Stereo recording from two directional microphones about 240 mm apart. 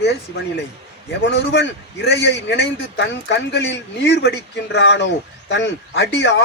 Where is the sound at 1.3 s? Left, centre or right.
Left.